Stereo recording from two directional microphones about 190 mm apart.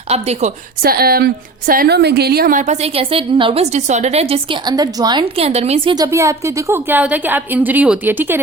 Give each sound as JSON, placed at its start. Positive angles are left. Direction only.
{"t": 0.1, "sound": "a woman's voice", "side_deg": -35}
{"t": 0.8, "sound": "a woman's voice", "side_deg": -55}
{"t": 4.7, "sound": "a woman's voice", "side_deg": -20}
{"t": 5.4, "sound": "a woman's voice", "side_deg": -35}